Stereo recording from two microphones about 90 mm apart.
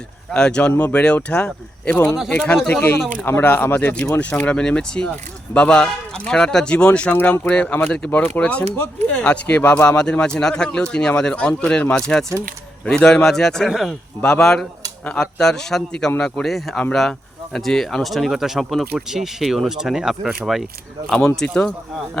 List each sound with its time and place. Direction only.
0.3 s speech: 10° left (ahead or behind)
14.2 s speech: 10° left (ahead or behind)
21.3 s speech: 10° left (ahead or behind)